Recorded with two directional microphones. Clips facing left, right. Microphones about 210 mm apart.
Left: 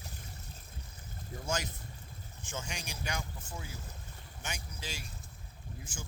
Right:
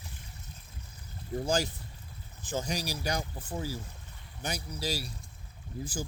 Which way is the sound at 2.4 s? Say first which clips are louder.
Right 9 dB; 35° right (ahead or behind).